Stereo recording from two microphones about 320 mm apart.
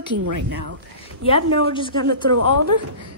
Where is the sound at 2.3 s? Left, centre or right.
Right.